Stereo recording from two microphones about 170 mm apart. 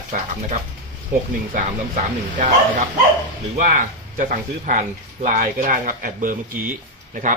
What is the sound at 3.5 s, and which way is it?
Speech, 50° right (ahead or behind).